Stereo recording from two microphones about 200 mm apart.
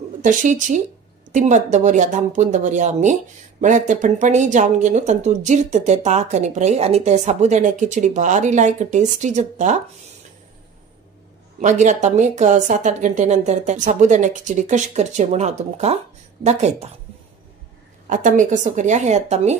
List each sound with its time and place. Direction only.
0.2 s speech: 40° right (ahead or behind)
11.6 s speech: 35° right (ahead or behind)
18.0 s speech: 40° right (ahead or behind)